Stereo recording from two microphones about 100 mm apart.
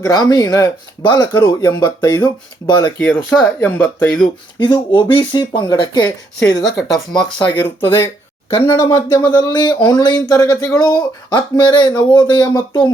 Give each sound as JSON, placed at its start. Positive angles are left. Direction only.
{"t": 0.0, "sound": "speech", "side_deg": 40}
{"t": 1.0, "sound": "speech", "side_deg": 45}
{"t": 3.0, "sound": "speech", "side_deg": 15}
{"t": 4.6, "sound": "speech", "side_deg": 50}
{"t": 6.7, "sound": "speech", "side_deg": 0}
{"t": 7.4, "sound": "speech", "side_deg": 15}
{"t": 9.2, "sound": "speech", "side_deg": 45}